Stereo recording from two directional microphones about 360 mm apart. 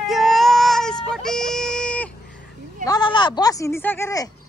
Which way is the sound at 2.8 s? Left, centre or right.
Centre.